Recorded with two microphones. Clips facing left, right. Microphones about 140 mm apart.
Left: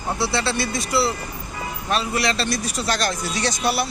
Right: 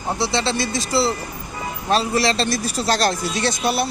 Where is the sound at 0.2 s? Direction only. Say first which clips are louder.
Right 1 dB; 20° right (ahead or behind).